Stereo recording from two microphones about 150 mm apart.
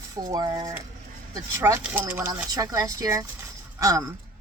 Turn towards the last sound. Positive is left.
turn(degrees=-25)  # may be behind; listen again after turning